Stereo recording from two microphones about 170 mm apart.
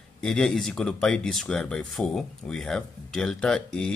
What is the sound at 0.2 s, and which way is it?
Speech, 5° left (ahead or behind).